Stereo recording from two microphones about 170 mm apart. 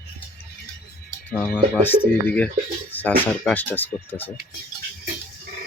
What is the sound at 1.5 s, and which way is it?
Speech, 10° left (ahead or behind).